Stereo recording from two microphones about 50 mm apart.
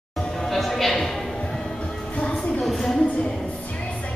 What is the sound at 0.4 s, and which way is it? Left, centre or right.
Music, centre.